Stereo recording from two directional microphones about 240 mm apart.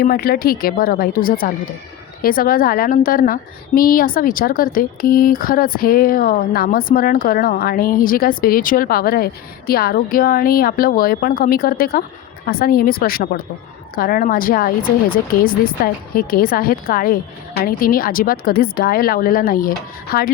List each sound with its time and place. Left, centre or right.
0.0 s speech: left